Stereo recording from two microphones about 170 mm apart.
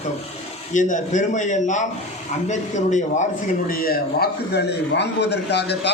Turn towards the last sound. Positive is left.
turn(degrees=80)